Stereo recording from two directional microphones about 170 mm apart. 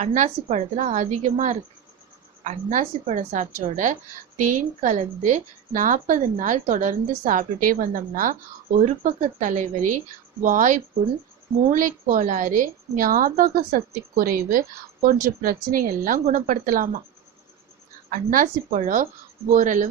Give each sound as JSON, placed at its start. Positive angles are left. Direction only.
{"t": 0.0, "sound": "a woman's voice", "side_deg": -50}
{"t": 18.1, "sound": "a woman's voice", "side_deg": -55}